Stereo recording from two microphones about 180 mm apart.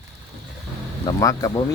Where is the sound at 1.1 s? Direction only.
20° left (ahead or behind).